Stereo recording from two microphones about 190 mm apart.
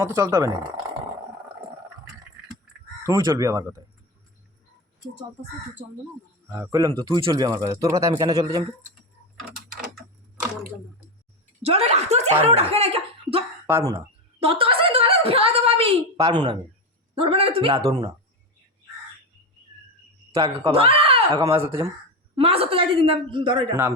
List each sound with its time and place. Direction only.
0.0 s speech: 15° right (ahead or behind)
3.0 s speech: 15° right (ahead or behind)
6.5 s speech: 15° right (ahead or behind)
11.6 s speech: 35° right (ahead or behind)
13.7 s speech: 15° right (ahead or behind)
14.3 s a sound: 30° right (ahead or behind)
16.1 s speech: 15° right (ahead or behind)
17.2 s speech: 30° right (ahead or behind)
20.4 s speech: 30° right (ahead or behind)
21.6 s speech: 15° right (ahead or behind)
22.4 s speech: 30° right (ahead or behind)